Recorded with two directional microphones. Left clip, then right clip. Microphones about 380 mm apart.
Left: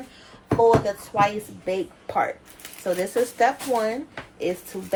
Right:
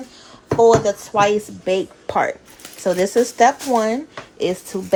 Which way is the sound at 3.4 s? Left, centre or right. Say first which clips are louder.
Right 6 dB; right.